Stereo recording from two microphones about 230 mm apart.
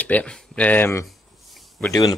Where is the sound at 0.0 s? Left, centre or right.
Centre.